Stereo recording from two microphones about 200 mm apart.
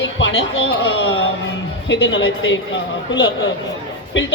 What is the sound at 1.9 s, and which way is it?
Speech, 65° left (ahead or behind).